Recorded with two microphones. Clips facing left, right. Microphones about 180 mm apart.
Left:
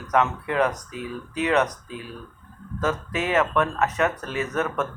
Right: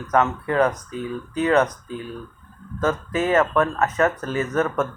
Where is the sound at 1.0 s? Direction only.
35° right (ahead or behind).